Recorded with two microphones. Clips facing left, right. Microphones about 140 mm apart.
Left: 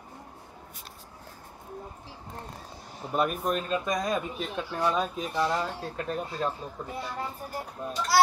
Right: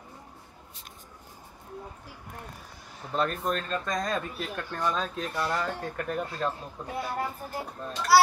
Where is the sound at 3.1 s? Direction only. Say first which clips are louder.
Left 1 dB; 10° left (ahead or behind).